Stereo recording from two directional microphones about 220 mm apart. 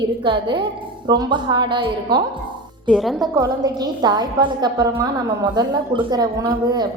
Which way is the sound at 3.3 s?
20° right (ahead or behind).